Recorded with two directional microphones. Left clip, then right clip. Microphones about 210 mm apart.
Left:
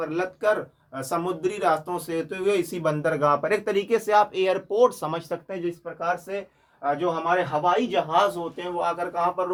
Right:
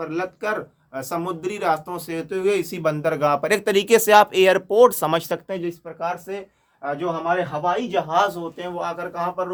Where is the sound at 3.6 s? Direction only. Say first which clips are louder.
Right 7 dB; 65° right (ahead or behind).